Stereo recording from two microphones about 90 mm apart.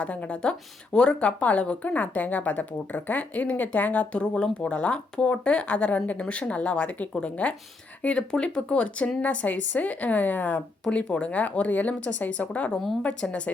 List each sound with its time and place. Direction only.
0.0 s speech: 15° left (ahead or behind)